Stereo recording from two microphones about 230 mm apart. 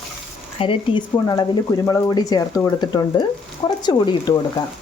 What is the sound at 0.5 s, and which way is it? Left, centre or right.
Speech, left.